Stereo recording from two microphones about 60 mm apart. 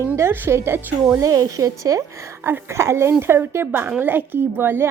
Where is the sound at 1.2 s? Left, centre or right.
Right.